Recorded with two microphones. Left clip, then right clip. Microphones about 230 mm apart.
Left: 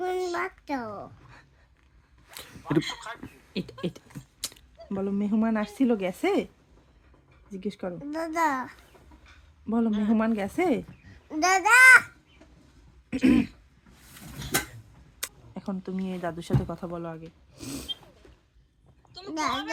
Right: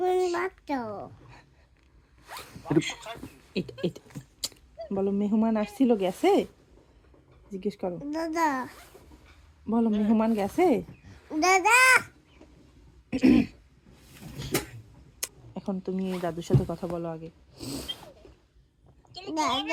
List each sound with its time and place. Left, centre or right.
0.0 s a sound: centre
2.9 s a man's voice: centre
3.5 s speech: centre
7.5 s speech: centre
13.1 s throat clearing: centre
15.2 s speech: centre
19.2 s speech: centre